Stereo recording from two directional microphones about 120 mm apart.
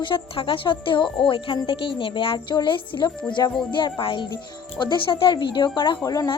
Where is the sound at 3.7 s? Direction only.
45° left (ahead or behind).